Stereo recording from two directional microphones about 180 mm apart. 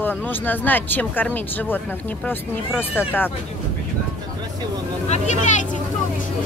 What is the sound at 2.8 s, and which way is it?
Speech, 10° left (ahead or behind).